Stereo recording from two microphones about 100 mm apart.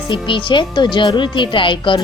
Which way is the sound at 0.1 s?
55° left (ahead or behind).